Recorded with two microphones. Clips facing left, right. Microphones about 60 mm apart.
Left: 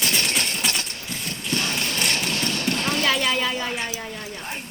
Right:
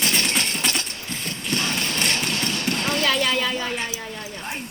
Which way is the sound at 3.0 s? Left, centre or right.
Centre.